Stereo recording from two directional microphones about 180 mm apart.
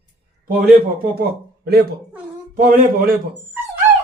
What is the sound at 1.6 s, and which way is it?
A man's voice, 60° right (ahead or behind).